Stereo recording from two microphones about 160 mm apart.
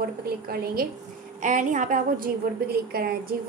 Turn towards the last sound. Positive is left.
turn(degrees=-70)  # may be behind; listen again after turning